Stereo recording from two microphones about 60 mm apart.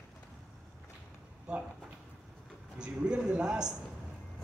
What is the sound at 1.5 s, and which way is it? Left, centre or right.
Speech, centre.